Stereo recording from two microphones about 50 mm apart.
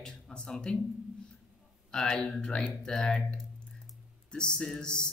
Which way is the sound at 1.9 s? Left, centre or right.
Centre.